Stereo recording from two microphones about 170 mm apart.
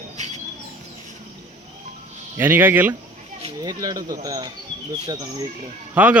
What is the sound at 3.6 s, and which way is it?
Speech, 25° right (ahead or behind).